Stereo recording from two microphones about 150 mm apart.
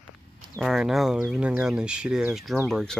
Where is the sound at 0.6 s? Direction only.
Centre (ahead or behind).